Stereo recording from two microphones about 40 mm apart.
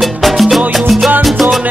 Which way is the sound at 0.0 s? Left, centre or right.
Centre.